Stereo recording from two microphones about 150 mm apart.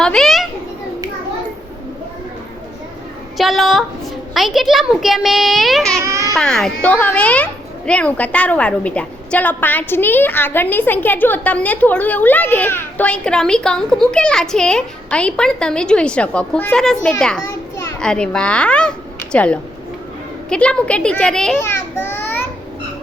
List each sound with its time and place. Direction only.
0.0 s a child's voice: 5° left (ahead or behind)
3.3 s a child's voice: centre (ahead or behind)
6.1 s baby cry: 20° right (ahead or behind)
6.3 s a child's voice: 5° left (ahead or behind)
21.6 s a child's voice: 15° left (ahead or behind)